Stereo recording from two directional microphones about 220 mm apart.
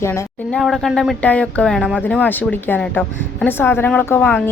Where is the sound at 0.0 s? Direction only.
10° left (ahead or behind).